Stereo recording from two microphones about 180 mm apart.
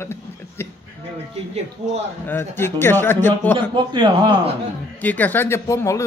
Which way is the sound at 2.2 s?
10° left (ahead or behind).